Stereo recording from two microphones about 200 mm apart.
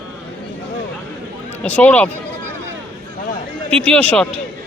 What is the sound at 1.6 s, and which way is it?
Speech, 5° left (ahead or behind).